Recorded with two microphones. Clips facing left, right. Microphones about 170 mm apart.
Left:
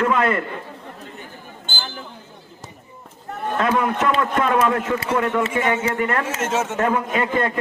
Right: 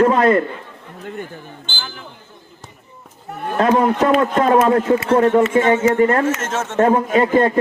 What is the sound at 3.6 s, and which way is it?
A man's voice, 30° right (ahead or behind).